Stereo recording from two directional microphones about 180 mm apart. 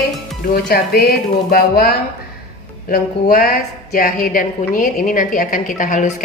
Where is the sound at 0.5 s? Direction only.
60° left (ahead or behind).